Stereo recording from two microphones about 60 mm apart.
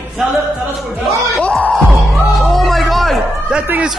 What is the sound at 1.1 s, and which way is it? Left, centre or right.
Music, right.